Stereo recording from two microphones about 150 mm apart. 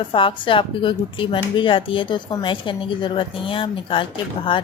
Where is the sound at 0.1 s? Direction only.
35° left (ahead or behind).